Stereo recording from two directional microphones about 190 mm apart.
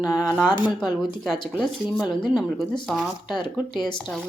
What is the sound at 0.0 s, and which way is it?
Speech, 5° right (ahead or behind).